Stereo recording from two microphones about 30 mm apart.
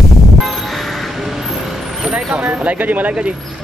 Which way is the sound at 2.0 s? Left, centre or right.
Right.